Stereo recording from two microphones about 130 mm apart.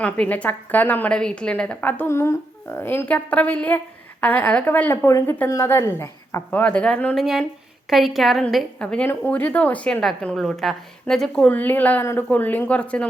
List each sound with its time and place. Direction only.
0.0 s a woman's voice: 10° left (ahead or behind)
6.6 s a woman's voice: 10° left (ahead or behind)